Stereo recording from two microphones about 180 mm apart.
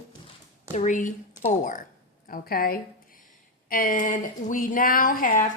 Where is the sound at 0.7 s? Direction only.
45° left (ahead or behind).